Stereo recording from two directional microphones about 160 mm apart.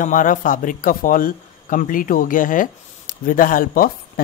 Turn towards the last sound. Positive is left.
turn(degrees=60)  # may be behind; listen again after turning